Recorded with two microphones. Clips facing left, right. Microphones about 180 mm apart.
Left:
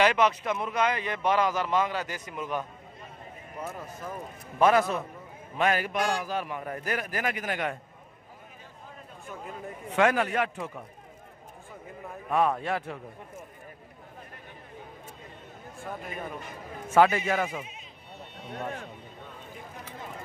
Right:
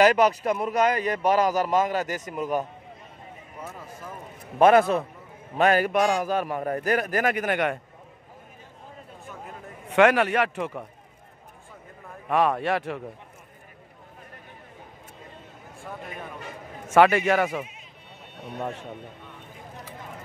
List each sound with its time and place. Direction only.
0.0 s a man's voice: 40° right (ahead or behind)
4.6 s a man's voice: 55° right (ahead or behind); by 7.8 s 70° right (ahead or behind)
9.8 s a man's voice: 75° right (ahead or behind)
12.3 s a man's voice: 75° right (ahead or behind)
16.9 s a man's voice: 75° right (ahead or behind)